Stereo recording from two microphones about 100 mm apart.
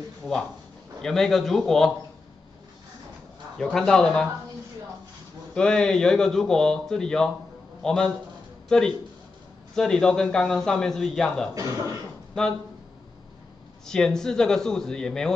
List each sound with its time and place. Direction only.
1.0 s a man's voice: 5° left (ahead or behind)
3.5 s speech: 5° left (ahead or behind)
5.5 s a man's voice: 10° left (ahead or behind)
11.5 s speech: 30° right (ahead or behind)
13.8 s a man's voice: 5° left (ahead or behind)